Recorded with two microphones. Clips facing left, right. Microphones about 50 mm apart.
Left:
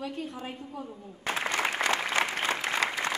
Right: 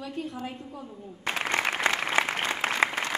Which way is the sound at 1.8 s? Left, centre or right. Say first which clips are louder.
Right 2 dB; right.